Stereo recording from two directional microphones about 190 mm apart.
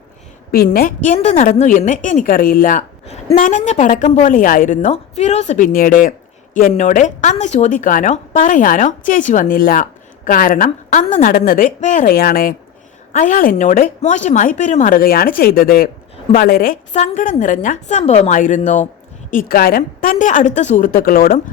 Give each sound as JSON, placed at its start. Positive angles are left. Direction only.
{"t": 0.5, "sound": "a woman's voice", "side_deg": 50}
{"t": 19.3, "sound": "a woman's voice", "side_deg": 50}